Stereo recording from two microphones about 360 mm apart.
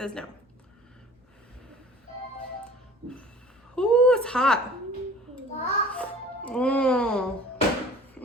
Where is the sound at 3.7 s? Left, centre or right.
Centre.